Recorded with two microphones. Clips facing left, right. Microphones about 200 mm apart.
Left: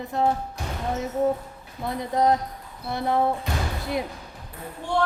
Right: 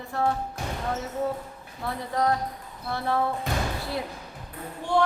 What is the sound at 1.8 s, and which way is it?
Speech, 20° left (ahead or behind).